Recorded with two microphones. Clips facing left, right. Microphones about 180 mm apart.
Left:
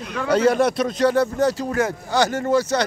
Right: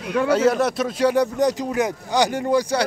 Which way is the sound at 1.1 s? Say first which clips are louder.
Even; 15° right (ahead or behind).